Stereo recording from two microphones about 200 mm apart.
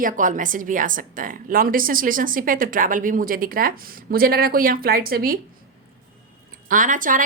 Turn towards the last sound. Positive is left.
turn(degrees=-40)  # may be behind; listen again after turning